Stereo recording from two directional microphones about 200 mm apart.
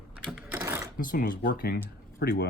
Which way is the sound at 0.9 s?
50° left (ahead or behind).